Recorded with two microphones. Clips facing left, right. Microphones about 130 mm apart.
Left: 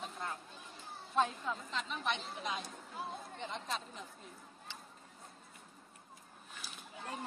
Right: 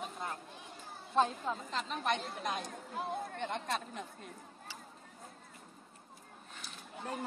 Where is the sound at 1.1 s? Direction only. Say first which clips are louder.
Right 3 dB; 35° right (ahead or behind); by 4.3 s 65° right (ahead or behind).